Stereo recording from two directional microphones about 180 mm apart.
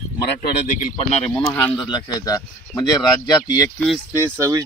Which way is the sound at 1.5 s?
20° left (ahead or behind).